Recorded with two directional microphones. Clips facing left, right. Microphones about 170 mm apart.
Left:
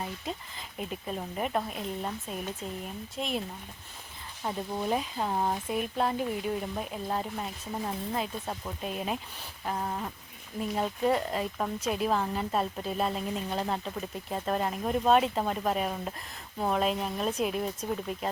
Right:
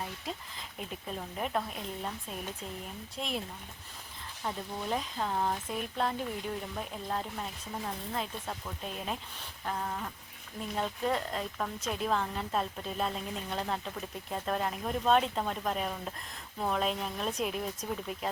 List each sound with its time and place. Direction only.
0.0 s a woman's voice: centre (ahead or behind)
4.4 s speech: 15° left (ahead or behind)
9.6 s a woman's voice: 15° left (ahead or behind); by 18.3 s centre (ahead or behind)